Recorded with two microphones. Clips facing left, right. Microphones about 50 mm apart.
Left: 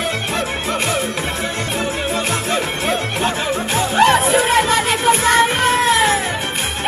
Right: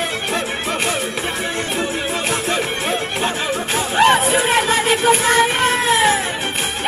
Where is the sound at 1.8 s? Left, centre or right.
Right.